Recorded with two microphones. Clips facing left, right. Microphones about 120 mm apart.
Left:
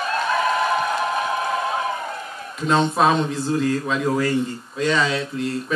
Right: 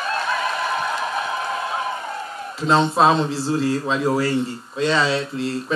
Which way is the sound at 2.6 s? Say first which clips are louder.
Right 2 dB; 30° right (ahead or behind).